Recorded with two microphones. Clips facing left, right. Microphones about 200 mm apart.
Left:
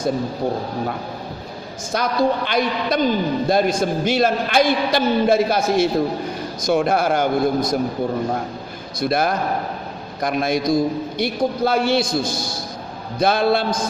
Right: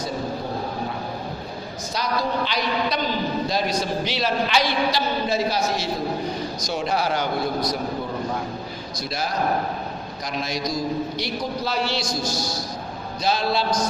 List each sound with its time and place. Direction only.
1.9 s a man's voice: 50° left (ahead or behind)
9.0 s a man's voice: 55° left (ahead or behind)